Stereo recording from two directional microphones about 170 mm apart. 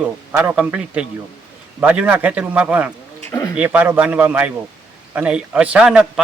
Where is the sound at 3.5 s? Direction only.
10° right (ahead or behind).